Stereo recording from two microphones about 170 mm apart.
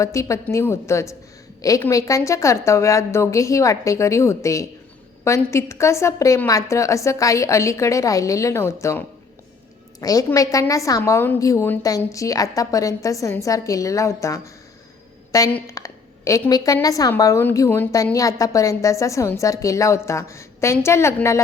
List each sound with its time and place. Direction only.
0.0 s a woman's voice: 20° left (ahead or behind)